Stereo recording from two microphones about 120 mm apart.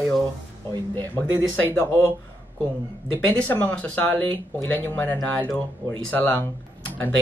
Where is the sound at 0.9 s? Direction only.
15° left (ahead or behind).